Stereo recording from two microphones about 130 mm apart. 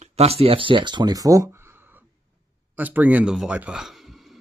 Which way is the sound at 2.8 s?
15° right (ahead or behind).